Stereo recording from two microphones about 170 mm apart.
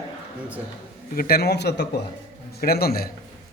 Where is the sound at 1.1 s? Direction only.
65° left (ahead or behind); by 1.8 s 80° left.